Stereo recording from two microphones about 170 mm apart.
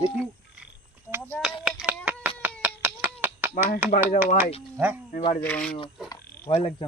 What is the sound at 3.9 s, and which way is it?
Speech, 55° left (ahead or behind).